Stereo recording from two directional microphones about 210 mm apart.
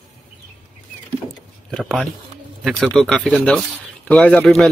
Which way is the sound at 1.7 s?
Centre (ahead or behind).